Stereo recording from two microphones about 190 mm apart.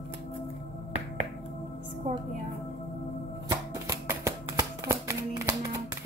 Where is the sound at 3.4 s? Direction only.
15° right (ahead or behind).